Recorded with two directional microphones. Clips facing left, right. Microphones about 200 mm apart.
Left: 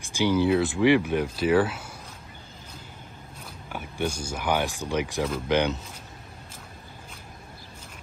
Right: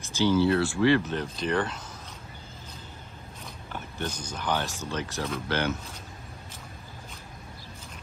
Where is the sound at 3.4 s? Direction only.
10° left (ahead or behind).